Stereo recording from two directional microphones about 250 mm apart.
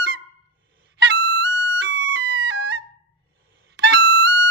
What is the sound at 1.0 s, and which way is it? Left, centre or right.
Music, right.